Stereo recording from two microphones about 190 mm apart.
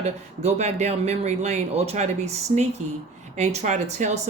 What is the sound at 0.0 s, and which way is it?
Speech, 35° right (ahead or behind).